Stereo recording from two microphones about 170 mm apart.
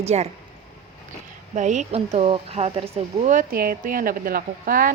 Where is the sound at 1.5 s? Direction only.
45° right (ahead or behind).